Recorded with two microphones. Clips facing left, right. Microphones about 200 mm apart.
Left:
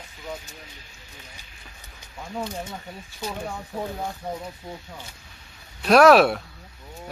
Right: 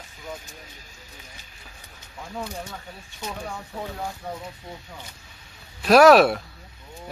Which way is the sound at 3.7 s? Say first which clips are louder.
Left 4 dB; 20° left (ahead or behind).